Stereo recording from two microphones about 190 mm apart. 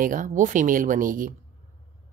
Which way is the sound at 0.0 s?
45° right (ahead or behind).